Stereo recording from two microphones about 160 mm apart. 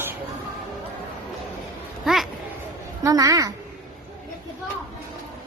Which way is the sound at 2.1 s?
5° right (ahead or behind).